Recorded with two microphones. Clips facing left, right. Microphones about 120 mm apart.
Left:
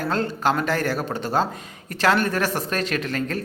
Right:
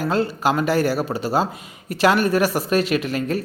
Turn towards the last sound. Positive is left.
turn(degrees=-10)  # may be behind; listen again after turning